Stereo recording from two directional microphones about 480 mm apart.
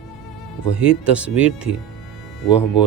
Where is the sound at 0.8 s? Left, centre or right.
Centre.